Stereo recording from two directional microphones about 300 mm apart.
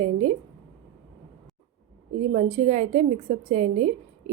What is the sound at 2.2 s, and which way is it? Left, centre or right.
A woman's voice, right.